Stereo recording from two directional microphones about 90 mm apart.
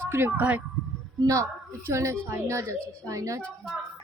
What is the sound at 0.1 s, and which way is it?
Speech, 25° right (ahead or behind).